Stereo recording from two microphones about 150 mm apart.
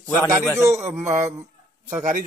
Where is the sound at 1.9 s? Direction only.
55° right (ahead or behind).